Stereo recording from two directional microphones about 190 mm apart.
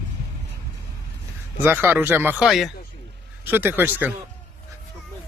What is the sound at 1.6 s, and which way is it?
Speech, 10° right (ahead or behind).